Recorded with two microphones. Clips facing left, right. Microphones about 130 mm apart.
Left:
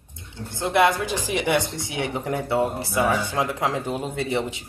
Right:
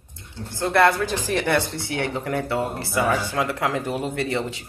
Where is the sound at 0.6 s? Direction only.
15° left (ahead or behind).